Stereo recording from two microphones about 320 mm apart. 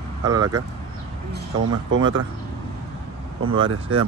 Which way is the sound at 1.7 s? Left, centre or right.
Right.